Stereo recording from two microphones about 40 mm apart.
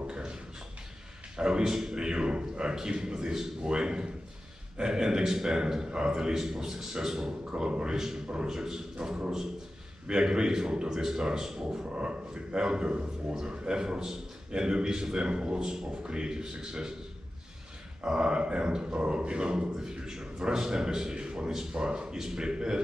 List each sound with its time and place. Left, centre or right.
0.0 s a sound: right
1.3 s a man's voice: centre
7.5 s a man's voice: right
11.8 s a man's voice: right
18.0 s a man's voice: centre